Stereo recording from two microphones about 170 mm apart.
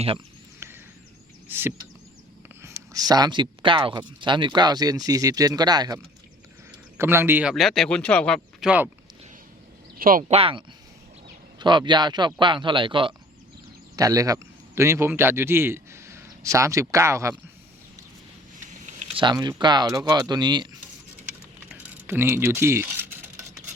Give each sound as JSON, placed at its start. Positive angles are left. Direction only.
{"t": 0.6, "sound": "a sound", "side_deg": -15}
{"t": 1.5, "sound": "chop", "side_deg": -15}
{"t": 2.6, "sound": "a man's voice", "side_deg": -20}
{"t": 7.5, "sound": "speech", "side_deg": 0}
{"t": 10.0, "sound": "speech", "side_deg": -55}
{"t": 10.2, "sound": "speech", "side_deg": -35}
{"t": 11.6, "sound": "a man's voice", "side_deg": -25}
{"t": 18.9, "sound": "speech", "side_deg": -35}
{"t": 21.7, "sound": "a sound", "side_deg": -10}